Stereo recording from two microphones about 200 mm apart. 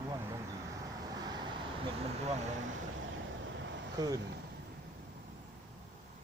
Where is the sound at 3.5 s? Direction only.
65° right (ahead or behind).